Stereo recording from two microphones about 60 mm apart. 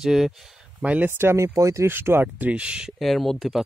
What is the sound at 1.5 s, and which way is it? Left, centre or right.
Speech, right.